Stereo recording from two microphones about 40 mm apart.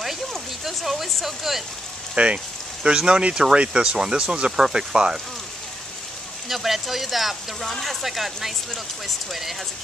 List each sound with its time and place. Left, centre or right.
0.7 s speech: centre
2.1 s a sound: right
3.1 s speech: right
4.5 s speech: centre
6.5 s speech: centre
7.6 s speech: centre
8.0 s speech: centre